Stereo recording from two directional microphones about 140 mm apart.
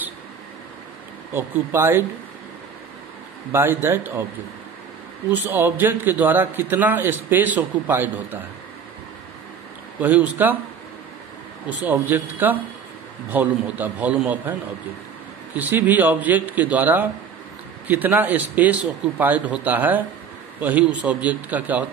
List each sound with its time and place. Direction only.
1.3 s a man's voice: 15° right (ahead or behind)
3.5 s a man's voice: 15° right (ahead or behind)
5.3 s a man's voice: 15° right (ahead or behind)
9.9 s a man's voice: 10° right (ahead or behind)
11.8 s a man's voice: 15° right (ahead or behind)
15.5 s a man's voice: 10° right (ahead or behind)
21.0 s a man's voice: 10° right (ahead or behind)